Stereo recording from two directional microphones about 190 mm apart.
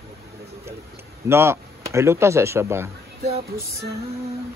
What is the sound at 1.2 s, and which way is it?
Speech, 15° right (ahead or behind).